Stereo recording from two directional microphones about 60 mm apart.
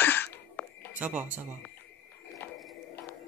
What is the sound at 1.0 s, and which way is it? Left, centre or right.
Speech, right.